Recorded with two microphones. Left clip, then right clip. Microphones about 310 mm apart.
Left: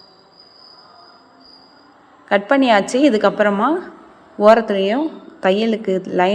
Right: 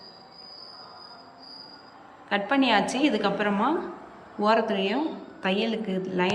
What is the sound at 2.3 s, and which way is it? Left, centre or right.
A woman's voice, centre.